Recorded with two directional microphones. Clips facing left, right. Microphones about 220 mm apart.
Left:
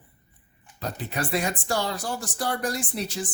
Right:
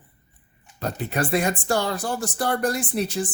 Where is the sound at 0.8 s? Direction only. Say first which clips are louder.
Right 5 dB; 55° right (ahead or behind).